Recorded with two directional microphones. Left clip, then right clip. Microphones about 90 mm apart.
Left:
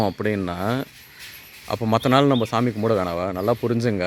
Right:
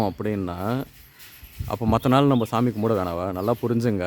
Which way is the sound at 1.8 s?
55° right (ahead or behind).